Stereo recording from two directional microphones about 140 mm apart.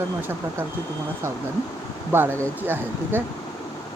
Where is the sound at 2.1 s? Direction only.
15° right (ahead or behind).